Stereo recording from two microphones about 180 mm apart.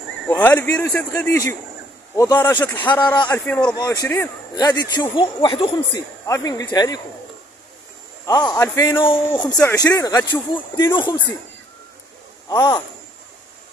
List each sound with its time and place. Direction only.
0.3 s a man's voice: 10° left (ahead or behind)
2.7 s a man's voice: 10° left (ahead or behind)
3.0 s speech: 25° left (ahead or behind)
3.4 s a man's voice: 5° left (ahead or behind)
3.7 s speech: 20° left (ahead or behind)
6.2 s speech: 20° left (ahead or behind)
8.3 s speech: 20° left (ahead or behind)
9.0 s speech: 25° left (ahead or behind)
12.4 s speech: 25° left (ahead or behind)